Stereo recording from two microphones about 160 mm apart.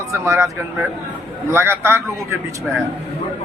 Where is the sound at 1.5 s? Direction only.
15° right (ahead or behind).